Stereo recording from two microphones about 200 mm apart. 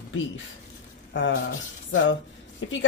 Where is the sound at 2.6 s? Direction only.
70° left (ahead or behind).